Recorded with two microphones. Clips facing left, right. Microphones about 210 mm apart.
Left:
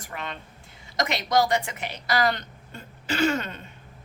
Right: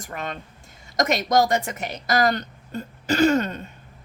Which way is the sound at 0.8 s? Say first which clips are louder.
Right 5 dB; 45° right (ahead or behind).